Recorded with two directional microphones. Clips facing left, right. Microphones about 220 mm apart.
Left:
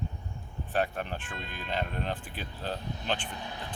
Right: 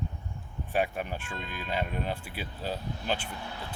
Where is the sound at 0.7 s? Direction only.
10° right (ahead or behind).